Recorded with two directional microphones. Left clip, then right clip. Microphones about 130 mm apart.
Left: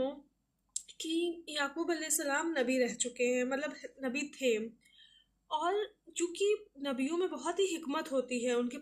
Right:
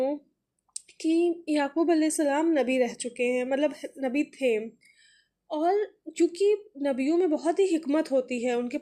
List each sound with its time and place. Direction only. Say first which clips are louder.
0.7 s a child's voice: right 10 dB; 40° right (ahead or behind)